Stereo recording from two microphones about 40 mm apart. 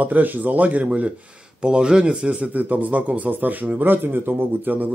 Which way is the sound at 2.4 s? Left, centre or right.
Right.